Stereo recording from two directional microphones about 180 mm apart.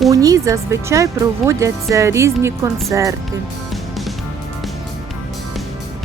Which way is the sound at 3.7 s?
Centre (ahead or behind).